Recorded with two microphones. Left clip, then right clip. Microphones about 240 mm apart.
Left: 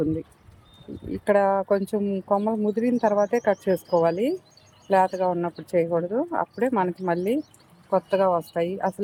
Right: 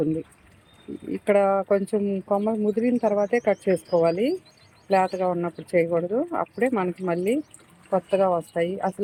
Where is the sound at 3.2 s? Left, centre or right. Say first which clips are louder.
Even; left.